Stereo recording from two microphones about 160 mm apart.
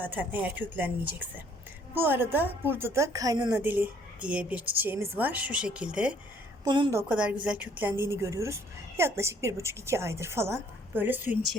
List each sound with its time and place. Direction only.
0.0 s a woman's voice: 10° right (ahead or behind)
2.0 s a woman's voice: 15° right (ahead or behind)
3.6 s a woman's voice: 10° right (ahead or behind)
6.7 s a woman's voice: 30° right (ahead or behind)
6.9 s a woman's voice: 10° right (ahead or behind)